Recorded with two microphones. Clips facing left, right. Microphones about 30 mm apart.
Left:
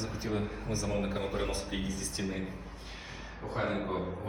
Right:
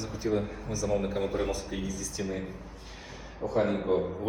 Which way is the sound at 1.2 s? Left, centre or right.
Left.